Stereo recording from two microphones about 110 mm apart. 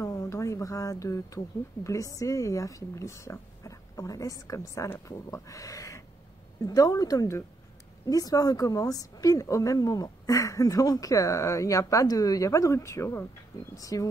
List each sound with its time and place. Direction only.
0.0 s a woman's voice: 25° left (ahead or behind)